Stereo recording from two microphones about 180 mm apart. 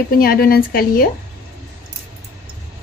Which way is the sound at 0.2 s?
55° left (ahead or behind).